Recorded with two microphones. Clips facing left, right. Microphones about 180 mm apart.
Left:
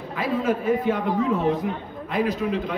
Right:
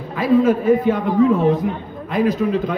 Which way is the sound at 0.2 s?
40° right (ahead or behind).